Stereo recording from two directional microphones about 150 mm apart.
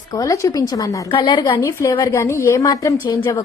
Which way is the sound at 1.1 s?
35° left (ahead or behind).